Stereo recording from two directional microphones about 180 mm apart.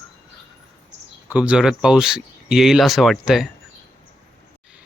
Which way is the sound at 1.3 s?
5° right (ahead or behind).